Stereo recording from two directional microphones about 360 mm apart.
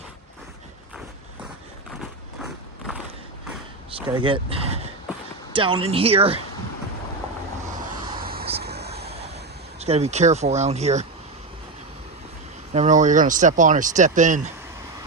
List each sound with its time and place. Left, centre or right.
2.4 s walk: centre
4.1 s speech: centre
8.2 s vehicle: right
9.8 s speech: centre
12.7 s speech: centre